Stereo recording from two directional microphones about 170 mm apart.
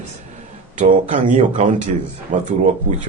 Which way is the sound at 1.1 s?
50° right (ahead or behind).